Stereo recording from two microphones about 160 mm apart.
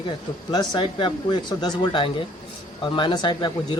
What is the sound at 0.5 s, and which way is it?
Speech, 25° left (ahead or behind).